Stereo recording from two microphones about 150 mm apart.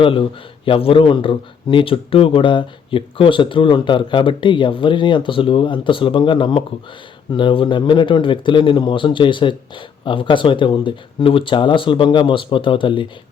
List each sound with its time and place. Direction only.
0.0 s speech: 35° left (ahead or behind)